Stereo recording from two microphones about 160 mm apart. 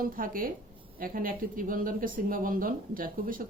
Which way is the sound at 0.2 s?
60° right (ahead or behind).